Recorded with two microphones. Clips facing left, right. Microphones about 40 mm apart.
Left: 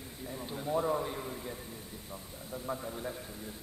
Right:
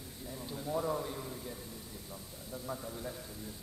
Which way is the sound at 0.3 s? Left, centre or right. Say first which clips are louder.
Left 3 dB; left.